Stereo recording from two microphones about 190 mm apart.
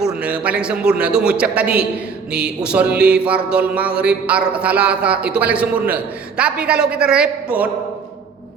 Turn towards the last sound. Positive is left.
turn(degrees=-5)  # may be behind; listen again after turning